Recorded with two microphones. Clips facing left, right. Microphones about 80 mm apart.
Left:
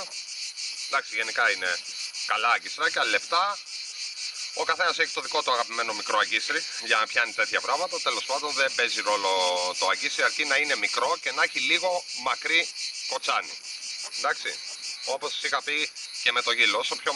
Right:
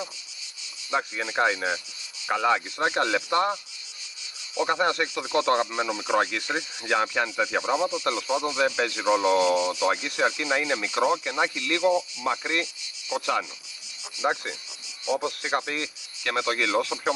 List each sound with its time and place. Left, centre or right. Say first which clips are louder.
0.9 s speech: right 1 dB; right
4.6 s speech: right 1 dB; centre